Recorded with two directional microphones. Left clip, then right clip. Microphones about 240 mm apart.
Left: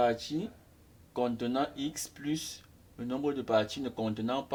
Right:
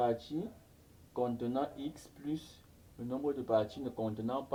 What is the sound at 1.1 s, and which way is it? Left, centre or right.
Speech, left.